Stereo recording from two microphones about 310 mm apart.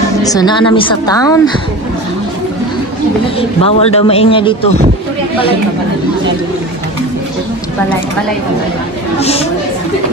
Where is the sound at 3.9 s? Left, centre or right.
Centre.